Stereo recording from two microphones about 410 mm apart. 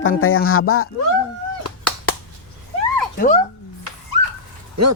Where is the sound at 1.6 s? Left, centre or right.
Left.